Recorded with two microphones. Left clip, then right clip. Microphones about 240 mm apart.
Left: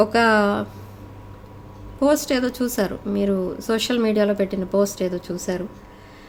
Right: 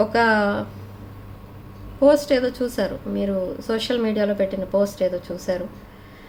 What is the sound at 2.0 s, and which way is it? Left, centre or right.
A woman's voice, left.